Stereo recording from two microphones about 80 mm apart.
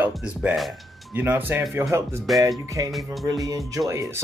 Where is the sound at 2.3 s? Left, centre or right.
Right.